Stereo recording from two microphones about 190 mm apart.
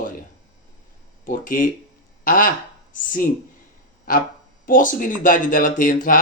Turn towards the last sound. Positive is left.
turn(degrees=45)  # may be behind; listen again after turning